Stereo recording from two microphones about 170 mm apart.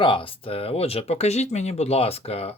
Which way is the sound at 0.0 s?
30° left (ahead or behind).